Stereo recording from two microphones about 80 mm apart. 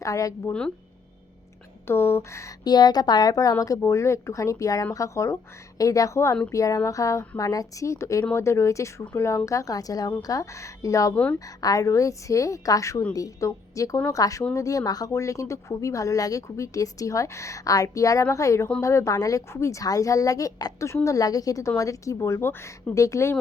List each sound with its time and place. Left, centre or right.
0.0 s speech: left
1.9 s speech: left
2.6 s a woman's voice: left
3.8 s speech: left
11.1 s a woman's voice: centre
11.3 s speech: left